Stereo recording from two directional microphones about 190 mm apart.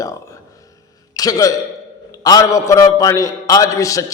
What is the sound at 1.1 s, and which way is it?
A man's voice, 20° left (ahead or behind).